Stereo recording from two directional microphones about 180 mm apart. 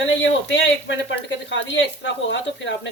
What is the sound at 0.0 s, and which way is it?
Speech, 85° left.